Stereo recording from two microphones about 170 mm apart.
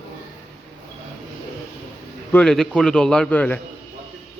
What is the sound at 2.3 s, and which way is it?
A man's voice, 5° left (ahead or behind).